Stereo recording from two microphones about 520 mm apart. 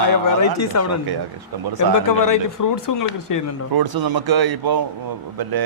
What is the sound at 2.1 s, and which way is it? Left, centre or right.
Speech, left.